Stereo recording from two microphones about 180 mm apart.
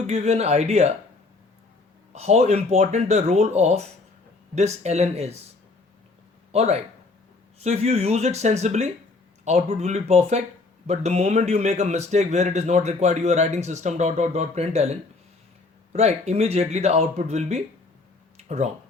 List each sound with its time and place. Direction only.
0.1 s speech: 35° right (ahead or behind)
2.1 s speech: 35° right (ahead or behind)
6.5 s speech: 35° right (ahead or behind)
18.3 s a sound: 40° right (ahead or behind)